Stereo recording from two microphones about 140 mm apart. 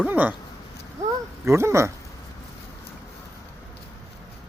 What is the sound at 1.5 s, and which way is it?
Speech, 20° right (ahead or behind).